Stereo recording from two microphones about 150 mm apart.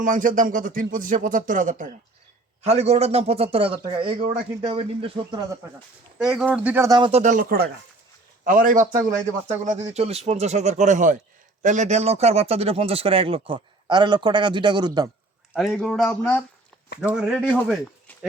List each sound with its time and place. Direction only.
0.0 s speech: 60° right (ahead or behind)
2.6 s a man's voice: 45° right (ahead or behind)
6.1 s speech: 5° right (ahead or behind)
6.8 s speech: 30° right (ahead or behind)
7.1 s a man's voice: 55° right (ahead or behind); by 15.1 s 25° right (ahead or behind)
15.7 s speech: 5° left (ahead or behind)
17.5 s speech: 5° left (ahead or behind)